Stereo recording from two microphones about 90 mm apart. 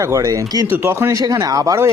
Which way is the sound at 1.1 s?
45° right (ahead or behind).